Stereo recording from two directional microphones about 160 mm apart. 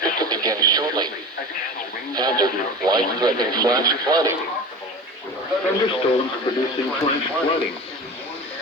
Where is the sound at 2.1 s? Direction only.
25° right (ahead or behind).